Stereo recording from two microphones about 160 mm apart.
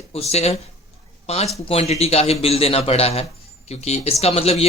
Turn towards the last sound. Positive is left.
turn(degrees=40)  # may be behind; listen again after turning